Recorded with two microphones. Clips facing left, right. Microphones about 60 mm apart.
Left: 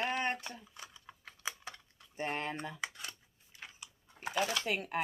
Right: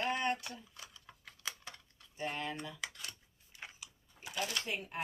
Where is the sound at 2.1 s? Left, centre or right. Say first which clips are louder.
Left 2 dB; left.